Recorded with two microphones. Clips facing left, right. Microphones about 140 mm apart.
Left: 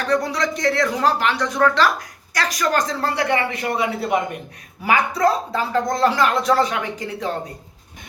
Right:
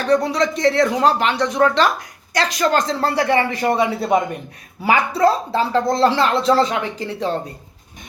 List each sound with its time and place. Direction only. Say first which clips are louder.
0.1 s speech: right 5 dB; 25° right (ahead or behind)